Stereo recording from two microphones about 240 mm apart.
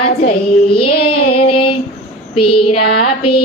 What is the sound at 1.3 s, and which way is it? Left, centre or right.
Female singing, left.